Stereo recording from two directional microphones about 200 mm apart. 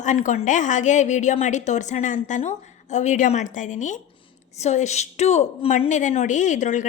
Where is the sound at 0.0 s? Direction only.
40° left (ahead or behind).